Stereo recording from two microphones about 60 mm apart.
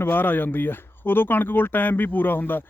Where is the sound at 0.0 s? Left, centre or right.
Left.